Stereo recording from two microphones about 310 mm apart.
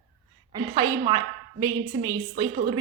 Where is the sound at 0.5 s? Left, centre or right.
Centre.